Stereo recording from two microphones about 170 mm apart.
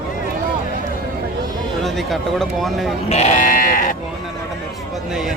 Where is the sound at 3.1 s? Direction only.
40° left (ahead or behind).